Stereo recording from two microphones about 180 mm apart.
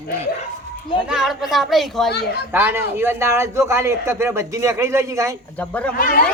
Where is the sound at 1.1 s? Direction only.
Centre (ahead or behind).